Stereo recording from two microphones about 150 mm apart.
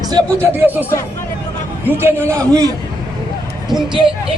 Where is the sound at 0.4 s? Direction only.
15° right (ahead or behind).